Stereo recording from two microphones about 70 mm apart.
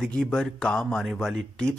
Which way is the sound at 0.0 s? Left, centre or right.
Centre.